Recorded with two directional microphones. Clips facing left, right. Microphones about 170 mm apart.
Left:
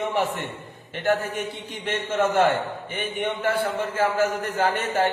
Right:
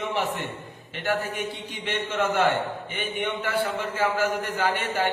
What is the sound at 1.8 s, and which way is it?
A man's voice, 50° left (ahead or behind).